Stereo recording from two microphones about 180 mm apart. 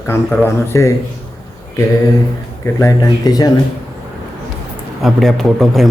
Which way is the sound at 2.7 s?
20° left (ahead or behind).